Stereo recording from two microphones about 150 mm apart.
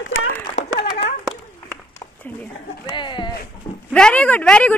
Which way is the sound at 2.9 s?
30° left (ahead or behind).